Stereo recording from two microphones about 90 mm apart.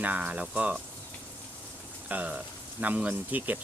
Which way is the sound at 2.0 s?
15° right (ahead or behind).